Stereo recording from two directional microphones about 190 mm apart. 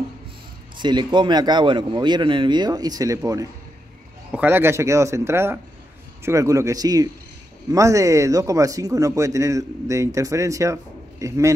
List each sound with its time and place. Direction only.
0.7 s a man's voice: 25° right (ahead or behind)